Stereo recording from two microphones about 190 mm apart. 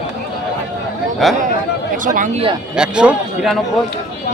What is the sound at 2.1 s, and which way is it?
Speech, 40° right (ahead or behind).